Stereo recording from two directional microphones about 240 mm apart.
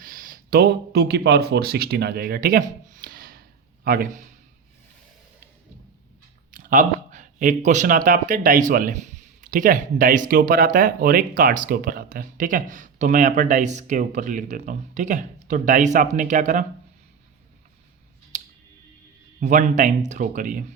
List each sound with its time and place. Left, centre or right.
0.0 s speech: right
6.5 s speech: right
18.3 s music: right
19.4 s speech: right